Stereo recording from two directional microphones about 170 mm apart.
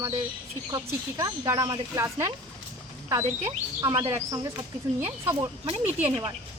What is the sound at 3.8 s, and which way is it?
Speech, 20° right (ahead or behind).